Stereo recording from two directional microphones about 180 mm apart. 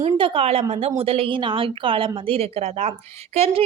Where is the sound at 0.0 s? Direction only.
35° right (ahead or behind).